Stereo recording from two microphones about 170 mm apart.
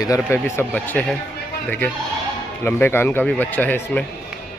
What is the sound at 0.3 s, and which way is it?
Speech, 10° left (ahead or behind).